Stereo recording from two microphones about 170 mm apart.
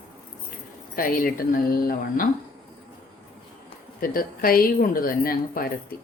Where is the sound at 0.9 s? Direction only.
55° left (ahead or behind).